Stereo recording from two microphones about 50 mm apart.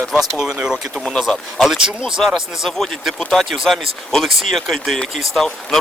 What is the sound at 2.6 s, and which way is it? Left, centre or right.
Speech, centre.